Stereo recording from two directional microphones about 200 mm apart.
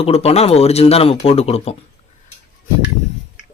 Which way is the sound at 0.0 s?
30° left (ahead or behind).